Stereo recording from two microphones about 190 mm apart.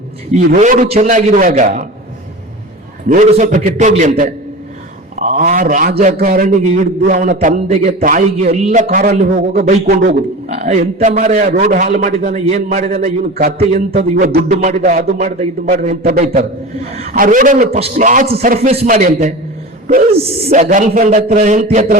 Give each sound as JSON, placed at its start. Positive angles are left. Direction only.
{"t": 0.3, "sound": "a man's voice", "side_deg": -40}
{"t": 3.1, "sound": "a man's voice", "side_deg": -40}
{"t": 14.3, "sound": "a man's voice", "side_deg": -50}
{"t": 14.7, "sound": "a man's voice", "side_deg": -40}
{"t": 16.9, "sound": "a man's voice", "side_deg": -35}
{"t": 17.7, "sound": "a man's voice", "side_deg": -35}
{"t": 20.5, "sound": "a man's voice", "side_deg": -45}